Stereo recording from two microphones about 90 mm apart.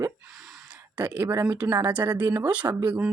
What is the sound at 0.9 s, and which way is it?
Speech, 20° right (ahead or behind).